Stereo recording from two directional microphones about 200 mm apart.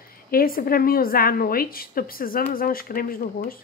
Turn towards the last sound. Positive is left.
turn(degrees=45)  # may be behind; listen again after turning